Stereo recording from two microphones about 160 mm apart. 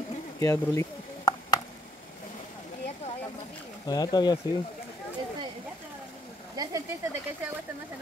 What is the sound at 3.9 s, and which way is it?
Speech, 25° left (ahead or behind).